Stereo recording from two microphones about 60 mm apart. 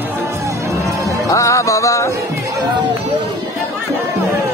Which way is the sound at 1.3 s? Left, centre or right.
Left.